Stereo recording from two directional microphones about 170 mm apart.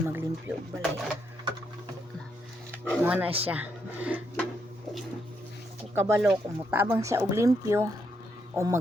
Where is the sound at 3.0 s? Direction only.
10° right (ahead or behind).